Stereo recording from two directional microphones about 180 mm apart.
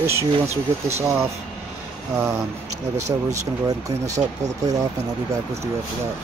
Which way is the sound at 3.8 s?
20° right (ahead or behind).